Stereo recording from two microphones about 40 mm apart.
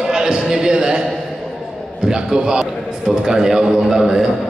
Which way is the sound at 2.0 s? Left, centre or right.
Centre.